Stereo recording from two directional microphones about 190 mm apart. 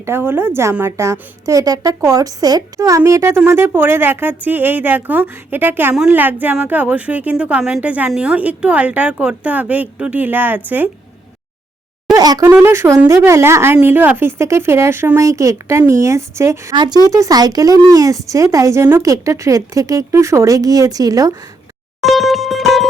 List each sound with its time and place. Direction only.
0.0 s a woman's voice: 10° right (ahead or behind)
12.1 s a woman's voice: 20° right (ahead or behind)
22.0 s music: centre (ahead or behind)